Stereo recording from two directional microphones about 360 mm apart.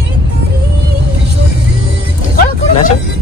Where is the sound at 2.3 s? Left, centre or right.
Left.